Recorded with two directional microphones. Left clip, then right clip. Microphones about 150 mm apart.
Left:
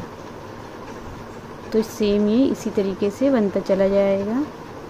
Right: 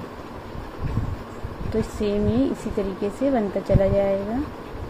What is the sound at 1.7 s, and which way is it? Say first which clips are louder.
Speech: left 4 dB; 30° left (ahead or behind).